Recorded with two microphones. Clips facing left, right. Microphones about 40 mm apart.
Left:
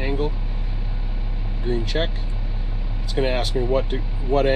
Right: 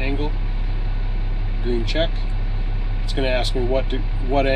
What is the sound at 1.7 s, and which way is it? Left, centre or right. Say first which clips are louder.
Speech: right 1 dB; centre.